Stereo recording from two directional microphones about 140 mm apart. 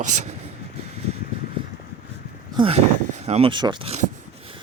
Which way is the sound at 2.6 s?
45° right (ahead or behind).